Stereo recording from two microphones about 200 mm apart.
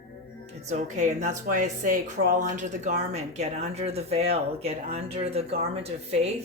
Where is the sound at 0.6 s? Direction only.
35° right (ahead or behind).